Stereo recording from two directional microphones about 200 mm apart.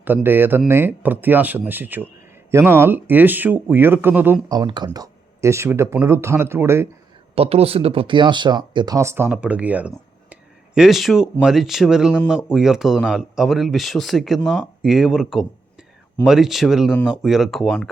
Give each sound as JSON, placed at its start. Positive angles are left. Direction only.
{"t": 0.0, "sound": "speech", "side_deg": -10}
{"t": 7.3, "sound": "speech", "side_deg": -30}